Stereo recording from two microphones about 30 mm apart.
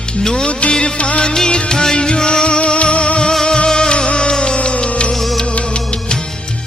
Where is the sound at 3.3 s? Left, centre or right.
Left.